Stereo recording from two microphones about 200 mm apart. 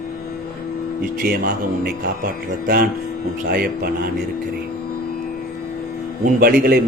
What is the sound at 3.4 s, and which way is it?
Speech, 50° right (ahead or behind).